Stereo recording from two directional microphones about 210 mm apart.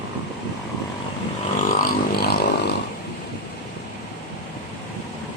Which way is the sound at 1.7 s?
45° left (ahead or behind).